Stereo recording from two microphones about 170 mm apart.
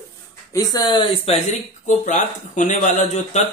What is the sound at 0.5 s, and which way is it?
Speech, 20° left (ahead or behind).